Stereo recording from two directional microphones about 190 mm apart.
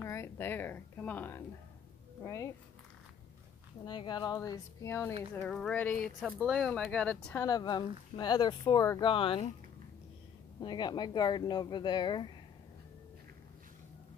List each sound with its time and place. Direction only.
0.0 s a woman's voice: 15° left (ahead or behind)
3.8 s speech: 25° left (ahead or behind); by 5.9 s 5° left (ahead or behind)
6.2 s speech: 5° right (ahead or behind)
7.4 s speech: 20° left (ahead or behind)
10.6 s speech: 20° left (ahead or behind)